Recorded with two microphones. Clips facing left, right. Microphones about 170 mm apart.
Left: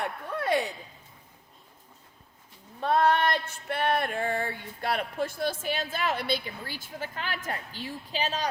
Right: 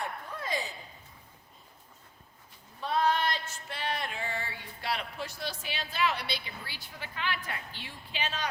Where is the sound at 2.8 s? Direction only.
55° left (ahead or behind).